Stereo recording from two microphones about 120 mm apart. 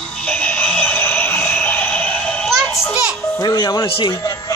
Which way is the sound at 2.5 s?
10° right (ahead or behind).